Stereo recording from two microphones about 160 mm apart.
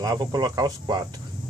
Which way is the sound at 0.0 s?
25° right (ahead or behind).